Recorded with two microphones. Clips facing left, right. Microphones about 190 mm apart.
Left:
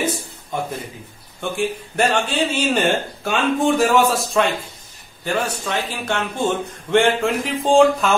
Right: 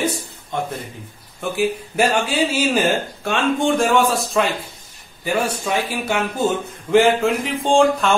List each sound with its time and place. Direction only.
0.5 s a man's voice: 5° left (ahead or behind)
1.4 s speech: 5° right (ahead or behind)